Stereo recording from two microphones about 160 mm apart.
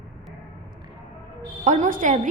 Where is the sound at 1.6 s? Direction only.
50° right (ahead or behind).